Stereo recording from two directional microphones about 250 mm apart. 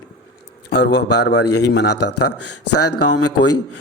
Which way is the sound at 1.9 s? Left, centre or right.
Left.